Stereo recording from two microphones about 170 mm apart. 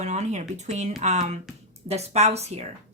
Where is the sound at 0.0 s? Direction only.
45° right (ahead or behind).